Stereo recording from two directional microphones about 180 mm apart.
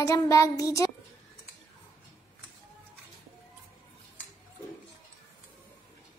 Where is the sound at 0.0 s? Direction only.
15° left (ahead or behind).